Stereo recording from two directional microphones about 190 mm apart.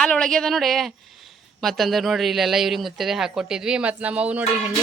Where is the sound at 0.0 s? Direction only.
5° left (ahead or behind).